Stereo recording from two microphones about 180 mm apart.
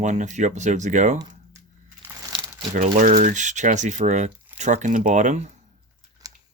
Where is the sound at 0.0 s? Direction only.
40° right (ahead or behind).